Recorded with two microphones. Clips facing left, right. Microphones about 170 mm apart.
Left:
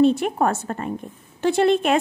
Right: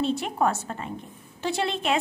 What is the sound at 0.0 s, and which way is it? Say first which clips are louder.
A woman's voice: left 7 dB; 55° left (ahead or behind).